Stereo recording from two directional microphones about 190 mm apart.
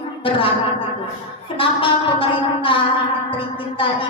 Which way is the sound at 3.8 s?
25° left (ahead or behind).